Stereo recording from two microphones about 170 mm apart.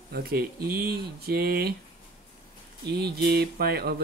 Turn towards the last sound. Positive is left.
turn(degrees=-65)  # may be behind; listen again after turning